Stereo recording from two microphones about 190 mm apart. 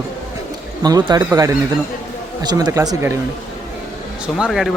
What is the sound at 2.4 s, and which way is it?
Speech, 20° right (ahead or behind).